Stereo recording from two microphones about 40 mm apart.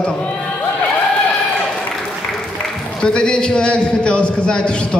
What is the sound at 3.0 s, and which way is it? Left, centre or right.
A man's voice, left.